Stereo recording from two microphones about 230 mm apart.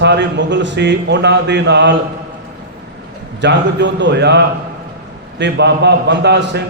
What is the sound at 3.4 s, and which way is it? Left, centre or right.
A man's voice, right.